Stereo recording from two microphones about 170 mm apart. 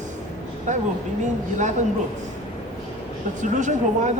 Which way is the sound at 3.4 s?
45° right (ahead or behind).